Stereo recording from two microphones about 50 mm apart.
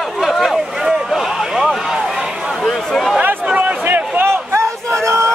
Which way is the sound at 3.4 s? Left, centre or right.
Right.